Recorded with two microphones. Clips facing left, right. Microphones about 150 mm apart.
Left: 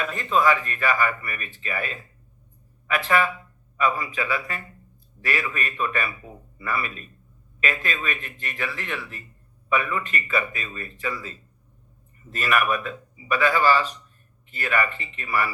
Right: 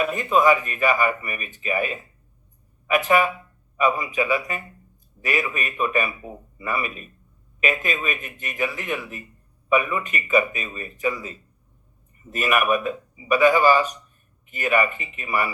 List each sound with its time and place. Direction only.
0.0 s speech: 10° right (ahead or behind)